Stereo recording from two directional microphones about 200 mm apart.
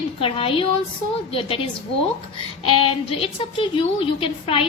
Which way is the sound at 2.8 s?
30° left (ahead or behind).